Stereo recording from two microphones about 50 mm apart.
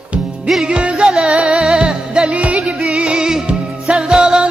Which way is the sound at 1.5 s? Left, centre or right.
Centre.